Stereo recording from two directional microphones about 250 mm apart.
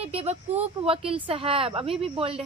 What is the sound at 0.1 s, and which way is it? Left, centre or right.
A woman's voice, right.